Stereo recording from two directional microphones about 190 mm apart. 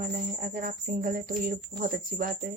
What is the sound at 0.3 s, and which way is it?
Speech, 50° right (ahead or behind).